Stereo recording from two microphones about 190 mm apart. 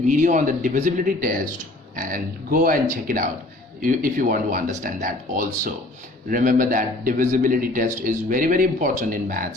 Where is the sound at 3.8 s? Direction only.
45° right (ahead or behind).